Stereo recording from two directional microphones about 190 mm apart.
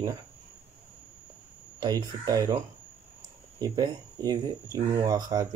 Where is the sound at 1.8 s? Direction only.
20° right (ahead or behind).